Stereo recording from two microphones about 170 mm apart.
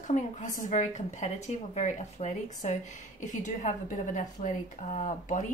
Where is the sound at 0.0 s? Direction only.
45° left (ahead or behind).